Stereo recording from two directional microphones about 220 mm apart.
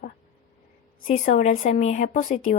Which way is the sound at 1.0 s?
35° left (ahead or behind).